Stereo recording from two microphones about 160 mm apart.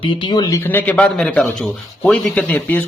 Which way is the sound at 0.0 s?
30° left (ahead or behind).